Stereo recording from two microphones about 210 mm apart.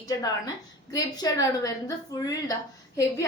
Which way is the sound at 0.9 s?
15° left (ahead or behind).